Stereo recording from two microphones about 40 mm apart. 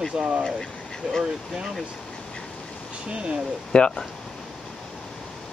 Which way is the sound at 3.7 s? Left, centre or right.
Left.